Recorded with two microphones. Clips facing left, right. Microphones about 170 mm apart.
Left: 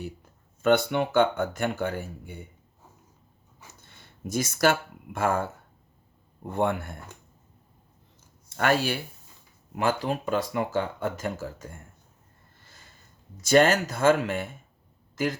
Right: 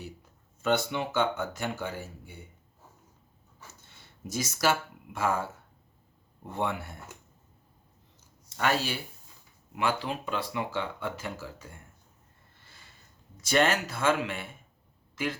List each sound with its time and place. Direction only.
0.6 s speech: 55° left (ahead or behind)
3.8 s speech: 55° left (ahead or behind)
6.5 s speech: 55° left (ahead or behind)
8.4 s speech: 55° left (ahead or behind)
13.4 s speech: 45° left (ahead or behind)
15.1 s a sound: 40° left (ahead or behind)